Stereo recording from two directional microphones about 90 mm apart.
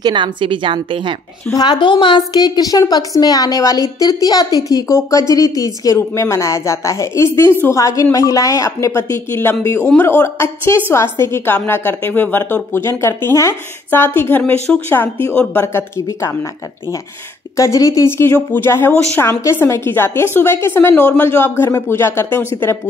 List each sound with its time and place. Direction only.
0.0 s a woman's voice: 60° right (ahead or behind)
1.5 s a woman's voice: 55° left (ahead or behind); by 14.4 s 25° left (ahead or behind)
14.7 s speech: 10° left (ahead or behind)
15.6 s a woman's voice: 30° left (ahead or behind)
17.6 s speech: 35° left (ahead or behind)